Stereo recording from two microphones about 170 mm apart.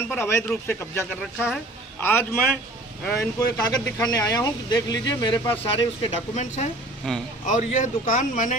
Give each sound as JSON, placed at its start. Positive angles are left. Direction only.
{"t": 0.0, "sound": "a man's voice", "side_deg": 15}
{"t": 1.2, "sound": "speech", "side_deg": 0}
{"t": 2.0, "sound": "speech", "side_deg": 10}
{"t": 6.0, "sound": "speech", "side_deg": 45}
{"t": 7.1, "sound": "speech", "side_deg": 0}
{"t": 7.4, "sound": "speech", "side_deg": 45}